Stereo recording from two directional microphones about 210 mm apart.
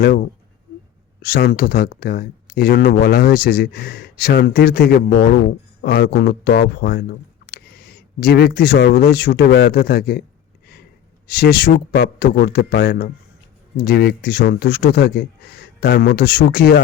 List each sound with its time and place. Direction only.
1.2 s speech: 50° left (ahead or behind)
8.2 s speech: 50° left (ahead or behind)
11.3 s speech: 50° left (ahead or behind)